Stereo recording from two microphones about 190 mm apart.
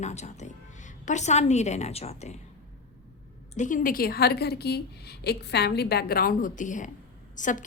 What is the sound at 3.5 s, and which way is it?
A woman's voice, 45° left (ahead or behind).